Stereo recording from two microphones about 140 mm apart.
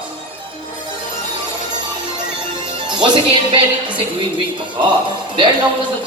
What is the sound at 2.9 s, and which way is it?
Music, 35° right (ahead or behind).